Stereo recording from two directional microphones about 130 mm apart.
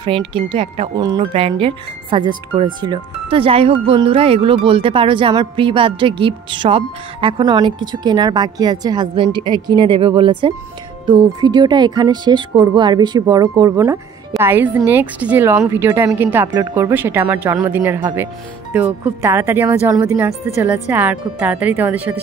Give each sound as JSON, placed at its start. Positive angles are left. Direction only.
{"t": 0.3, "sound": "speech", "side_deg": -45}
{"t": 0.9, "sound": "speech", "side_deg": -30}
{"t": 1.3, "sound": "speech", "side_deg": -45}